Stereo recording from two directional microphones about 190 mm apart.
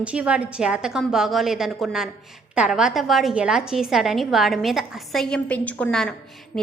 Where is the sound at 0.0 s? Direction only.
5° right (ahead or behind).